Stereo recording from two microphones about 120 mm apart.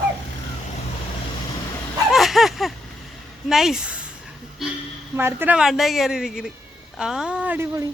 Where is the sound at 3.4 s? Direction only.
5° right (ahead or behind).